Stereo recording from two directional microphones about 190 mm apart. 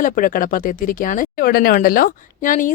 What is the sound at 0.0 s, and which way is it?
Speech, 45° left (ahead or behind).